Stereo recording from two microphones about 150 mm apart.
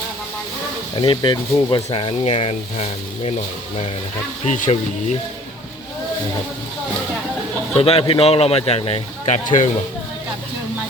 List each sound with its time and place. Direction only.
0.9 s speech: 30° left (ahead or behind)
4.4 s speech: 55° left (ahead or behind)
7.8 s speech: 40° left (ahead or behind)